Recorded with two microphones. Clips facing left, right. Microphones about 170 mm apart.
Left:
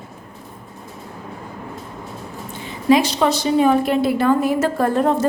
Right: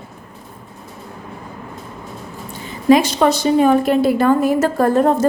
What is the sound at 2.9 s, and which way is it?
A woman's voice, 50° right (ahead or behind).